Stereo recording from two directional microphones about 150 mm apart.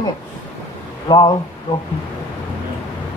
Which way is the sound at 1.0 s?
30° left (ahead or behind).